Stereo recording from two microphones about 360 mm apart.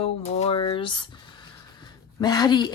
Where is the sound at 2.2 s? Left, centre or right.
Centre.